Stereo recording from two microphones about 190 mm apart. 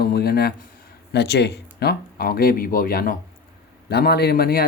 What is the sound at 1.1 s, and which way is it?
Speech, 60° left (ahead or behind).